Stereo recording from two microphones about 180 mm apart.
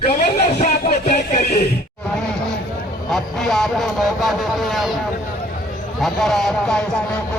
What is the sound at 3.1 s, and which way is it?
Speech, centre (ahead or behind).